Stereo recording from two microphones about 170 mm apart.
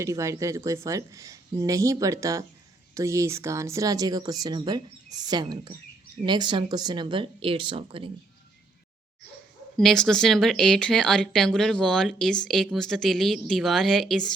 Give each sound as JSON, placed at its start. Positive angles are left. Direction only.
{"t": 0.0, "sound": "speech", "side_deg": -20}
{"t": 9.7, "sound": "speech", "side_deg": 0}